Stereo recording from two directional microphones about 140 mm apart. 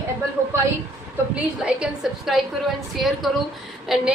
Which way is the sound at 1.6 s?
5° right (ahead or behind).